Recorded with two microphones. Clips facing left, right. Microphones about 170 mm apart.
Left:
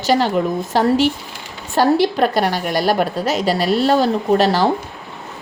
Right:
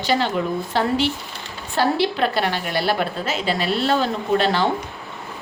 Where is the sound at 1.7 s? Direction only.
45° left (ahead or behind).